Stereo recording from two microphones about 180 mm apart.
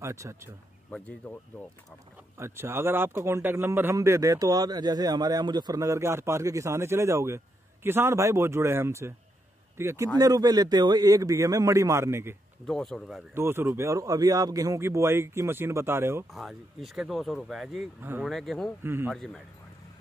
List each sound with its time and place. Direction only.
0.0 s a man's voice: 15° right (ahead or behind)
0.8 s speech: 5° left (ahead or behind)
2.3 s a man's voice: 15° right (ahead or behind)
12.6 s speech: 5° left (ahead or behind)
13.3 s a man's voice: 15° right (ahead or behind)
16.3 s speech: centre (ahead or behind)
18.8 s a man's voice: 10° right (ahead or behind)
19.1 s speech: centre (ahead or behind)